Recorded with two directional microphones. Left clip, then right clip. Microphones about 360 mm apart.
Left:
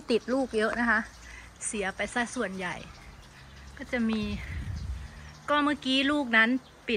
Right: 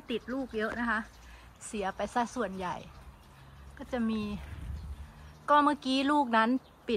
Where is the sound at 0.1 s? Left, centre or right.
Centre.